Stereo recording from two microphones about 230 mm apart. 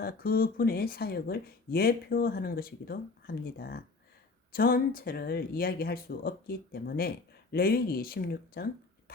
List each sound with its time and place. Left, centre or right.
0.0 s speech: left